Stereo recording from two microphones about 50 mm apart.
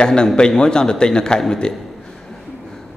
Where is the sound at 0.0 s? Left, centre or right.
Centre.